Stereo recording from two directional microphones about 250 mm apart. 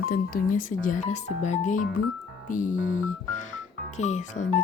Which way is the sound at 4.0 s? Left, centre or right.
Left.